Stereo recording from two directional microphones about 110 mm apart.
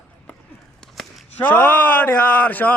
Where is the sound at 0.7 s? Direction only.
Centre (ahead or behind).